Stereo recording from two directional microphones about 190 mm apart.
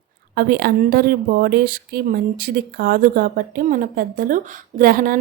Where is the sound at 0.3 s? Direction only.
50° right (ahead or behind).